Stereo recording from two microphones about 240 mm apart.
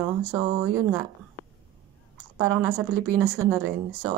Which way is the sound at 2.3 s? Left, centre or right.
Centre.